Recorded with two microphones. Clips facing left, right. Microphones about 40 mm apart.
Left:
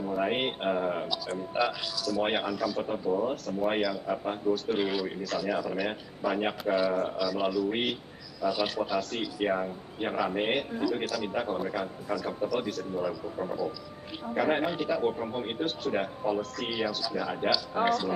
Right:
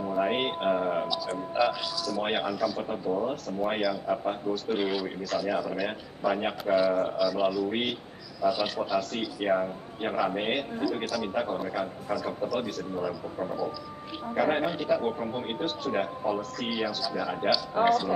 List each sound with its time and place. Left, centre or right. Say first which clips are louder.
0.1 s a man's voice: right 2 dB; centre